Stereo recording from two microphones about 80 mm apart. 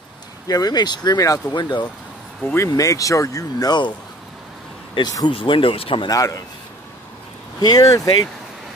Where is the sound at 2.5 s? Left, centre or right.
Left.